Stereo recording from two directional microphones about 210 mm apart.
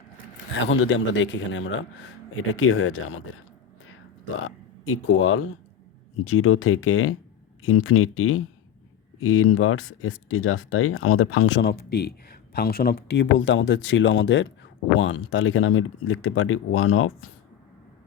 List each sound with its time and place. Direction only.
0.5 s a man's voice: 65° left (ahead or behind)
2.3 s speech: 75° left (ahead or behind)
4.4 s speech: 85° left